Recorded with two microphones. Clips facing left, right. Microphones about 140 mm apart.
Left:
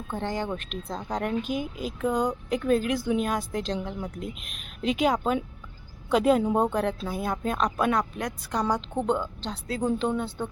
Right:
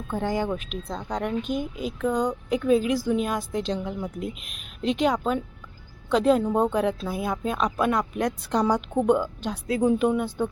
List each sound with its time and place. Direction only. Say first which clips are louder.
0.2 s speech: right 4 dB; 10° right (ahead or behind)
8.2 s a woman's voice: right 5 dB; 25° right (ahead or behind)
8.6 s a woman's voice: right 4 dB; 10° right (ahead or behind)